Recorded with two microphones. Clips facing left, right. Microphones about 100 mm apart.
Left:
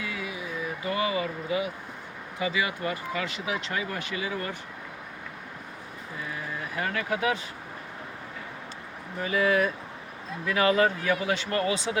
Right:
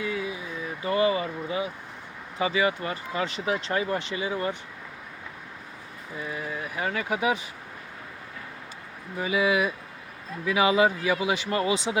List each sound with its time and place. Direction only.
0.0 s a sound: 30° right (ahead or behind)
0.9 s speech: 35° right (ahead or behind)
6.7 s speech: 15° right (ahead or behind)
9.1 s speech: 10° right (ahead or behind)